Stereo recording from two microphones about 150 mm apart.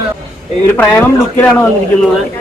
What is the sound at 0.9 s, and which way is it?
Speech, 10° left (ahead or behind).